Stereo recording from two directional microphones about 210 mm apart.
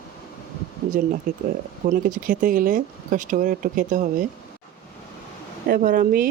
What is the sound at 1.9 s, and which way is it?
Speech, 40° right (ahead or behind).